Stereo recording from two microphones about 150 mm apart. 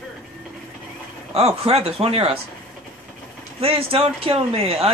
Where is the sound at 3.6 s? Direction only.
40° right (ahead or behind).